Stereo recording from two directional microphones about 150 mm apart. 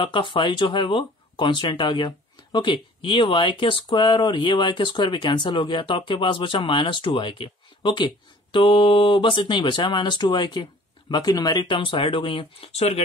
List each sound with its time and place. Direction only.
0.0 s speech: 35° left (ahead or behind)